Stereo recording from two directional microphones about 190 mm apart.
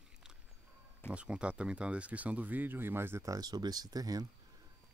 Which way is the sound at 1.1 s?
5° right (ahead or behind).